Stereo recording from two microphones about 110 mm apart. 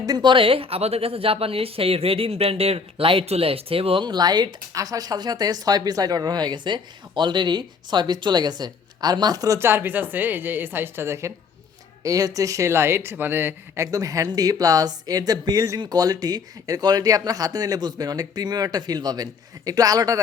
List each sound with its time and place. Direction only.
0.0 s speech: 40° right (ahead or behind)